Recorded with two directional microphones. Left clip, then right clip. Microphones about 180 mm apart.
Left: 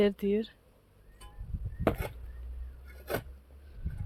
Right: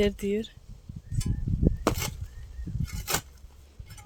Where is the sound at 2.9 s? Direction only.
20° right (ahead or behind).